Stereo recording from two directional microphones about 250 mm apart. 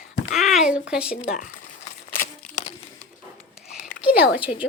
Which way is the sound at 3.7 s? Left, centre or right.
Centre.